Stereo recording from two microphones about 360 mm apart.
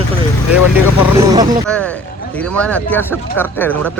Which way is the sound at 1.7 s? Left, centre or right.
Centre.